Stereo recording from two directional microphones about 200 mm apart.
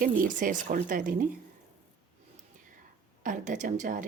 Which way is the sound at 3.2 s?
40° right (ahead or behind).